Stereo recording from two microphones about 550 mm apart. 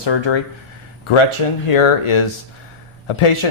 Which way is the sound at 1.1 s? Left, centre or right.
Left.